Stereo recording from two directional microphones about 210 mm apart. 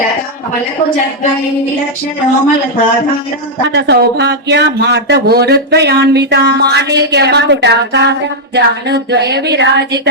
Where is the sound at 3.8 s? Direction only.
50° right (ahead or behind).